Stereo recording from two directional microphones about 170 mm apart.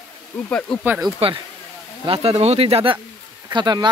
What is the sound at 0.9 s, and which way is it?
Speech, 20° right (ahead or behind).